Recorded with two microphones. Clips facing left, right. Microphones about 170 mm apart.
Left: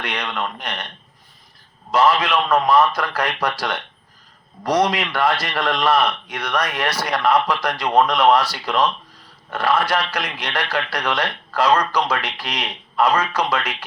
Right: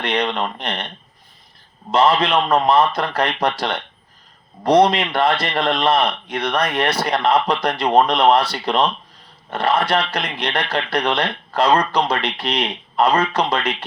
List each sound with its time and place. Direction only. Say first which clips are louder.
0.0 s speech: right 5 dB; 30° right (ahead or behind)
1.9 s speech: right 1 dB; 30° right (ahead or behind)